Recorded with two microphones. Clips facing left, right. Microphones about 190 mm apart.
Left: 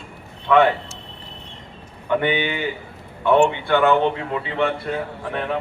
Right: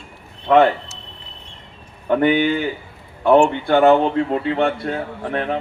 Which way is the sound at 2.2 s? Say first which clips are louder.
Right 6 dB; 45° right (ahead or behind).